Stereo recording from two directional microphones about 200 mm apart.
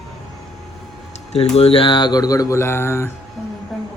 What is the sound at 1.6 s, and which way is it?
Speech, 30° left (ahead or behind).